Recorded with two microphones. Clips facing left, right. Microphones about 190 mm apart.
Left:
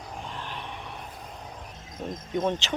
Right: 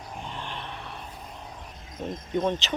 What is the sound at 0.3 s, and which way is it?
Vehicle, 5° left (ahead or behind).